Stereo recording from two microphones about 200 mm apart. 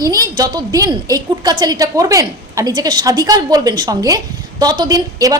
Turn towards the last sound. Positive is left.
turn(degrees=-20)  # may be behind; listen again after turning